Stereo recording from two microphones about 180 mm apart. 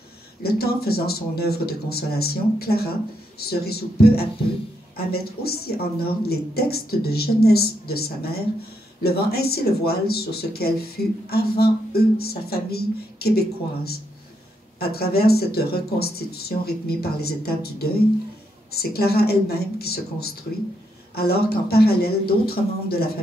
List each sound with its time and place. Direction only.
0.4 s speech: 60° left (ahead or behind)